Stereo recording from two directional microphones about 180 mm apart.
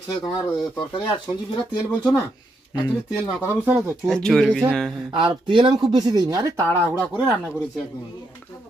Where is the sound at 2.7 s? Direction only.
20° left (ahead or behind).